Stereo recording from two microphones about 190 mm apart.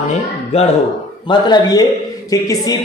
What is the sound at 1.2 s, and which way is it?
Speech, 20° left (ahead or behind).